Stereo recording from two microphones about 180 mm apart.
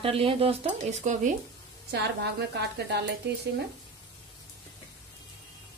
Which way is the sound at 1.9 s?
65° right (ahead or behind).